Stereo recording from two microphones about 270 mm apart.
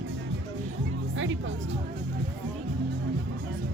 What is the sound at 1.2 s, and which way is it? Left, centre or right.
Music, right.